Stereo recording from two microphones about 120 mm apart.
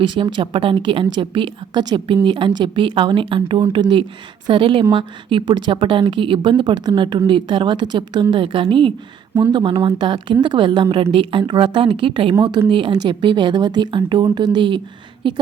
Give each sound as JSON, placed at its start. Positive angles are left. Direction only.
{"t": 0.0, "sound": "a woman's voice", "side_deg": -40}